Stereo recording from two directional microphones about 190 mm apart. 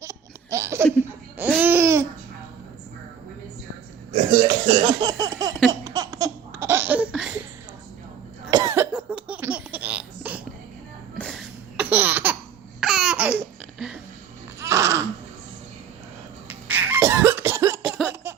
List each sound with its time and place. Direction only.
0.0 s laughter: 15° right (ahead or behind)
1.4 s babbling: 10° right (ahead or behind)
4.4 s speech: 25° right (ahead or behind)
5.8 s laughter: 20° right (ahead or behind)
8.4 s cough: 20° right (ahead or behind)
10.3 s a sound: 10° right (ahead or behind)
11.2 s a sound: 5° left (ahead or behind)
11.8 s laughter: 10° right (ahead or behind)
14.6 s babbling: 15° right (ahead or behind)
16.5 s cough: 10° right (ahead or behind)
18.1 s a sound: 10° right (ahead or behind)